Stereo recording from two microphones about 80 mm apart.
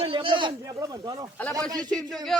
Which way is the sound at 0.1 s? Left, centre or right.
Right.